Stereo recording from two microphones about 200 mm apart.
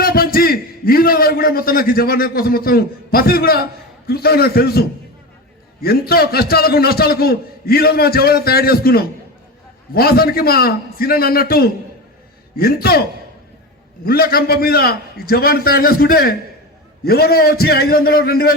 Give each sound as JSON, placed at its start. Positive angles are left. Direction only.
{"t": 0.0, "sound": "a man's voice", "side_deg": 45}
{"t": 14.0, "sound": "a man's voice", "side_deg": 50}